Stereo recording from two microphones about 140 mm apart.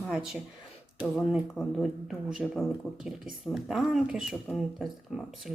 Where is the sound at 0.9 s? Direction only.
5° right (ahead or behind).